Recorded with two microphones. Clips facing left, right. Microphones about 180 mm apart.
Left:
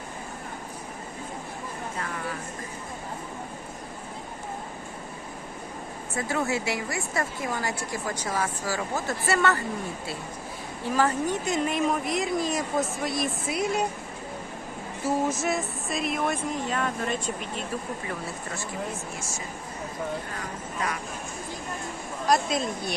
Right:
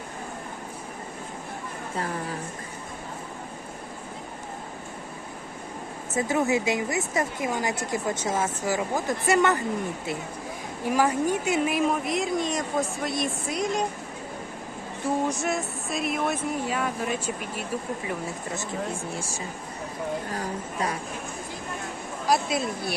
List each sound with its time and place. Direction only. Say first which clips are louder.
6.1 s speech: right 4 dB; 20° right (ahead or behind)
10.8 s a woman's voice: right 2 dB; 10° right (ahead or behind); by 13.8 s 5° left (ahead or behind)
15.0 s a woman's voice: even; centre (ahead or behind)
20.3 s speech: right 4 dB; 35° right (ahead or behind)
22.3 s a woman's voice: even; 5° right (ahead or behind)